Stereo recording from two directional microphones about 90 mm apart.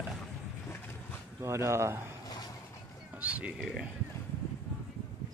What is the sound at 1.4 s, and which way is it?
Speech, 35° right (ahead or behind).